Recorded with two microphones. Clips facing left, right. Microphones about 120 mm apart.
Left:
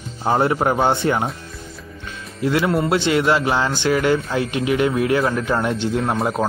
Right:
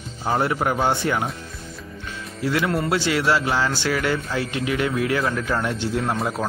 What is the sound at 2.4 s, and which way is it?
A man's voice, 20° left (ahead or behind).